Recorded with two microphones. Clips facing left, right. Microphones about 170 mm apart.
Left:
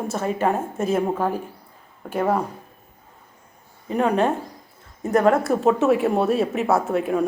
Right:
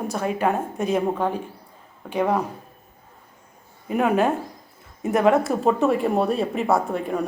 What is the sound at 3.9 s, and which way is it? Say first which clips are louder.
A woman's voice: even; 5° right (ahead or behind).